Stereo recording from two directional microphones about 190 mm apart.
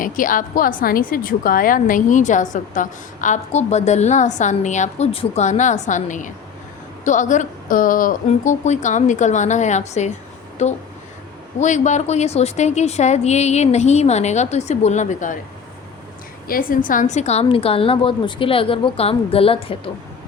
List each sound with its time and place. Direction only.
0.0 s a woman's voice: 45° left (ahead or behind)
16.5 s a woman's voice: 50° left (ahead or behind); by 19.9 s 30° left (ahead or behind)